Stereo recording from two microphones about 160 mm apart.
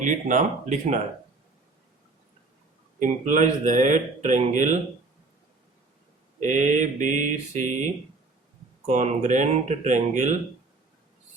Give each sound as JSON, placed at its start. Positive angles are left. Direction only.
{"t": 0.0, "sound": "speech", "side_deg": -55}
{"t": 3.0, "sound": "speech", "side_deg": -50}
{"t": 6.4, "sound": "speech", "side_deg": -50}
{"t": 8.9, "sound": "speech", "side_deg": -50}